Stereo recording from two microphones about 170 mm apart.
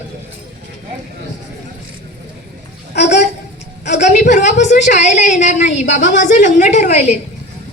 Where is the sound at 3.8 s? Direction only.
45° left (ahead or behind).